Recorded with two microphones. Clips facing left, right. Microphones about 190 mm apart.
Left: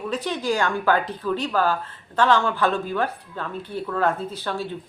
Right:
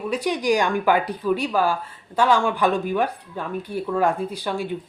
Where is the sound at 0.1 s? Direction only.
10° right (ahead or behind).